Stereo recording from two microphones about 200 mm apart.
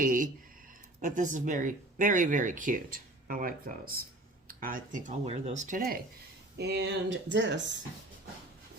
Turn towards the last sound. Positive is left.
turn(degrees=-65)  # may be behind; listen again after turning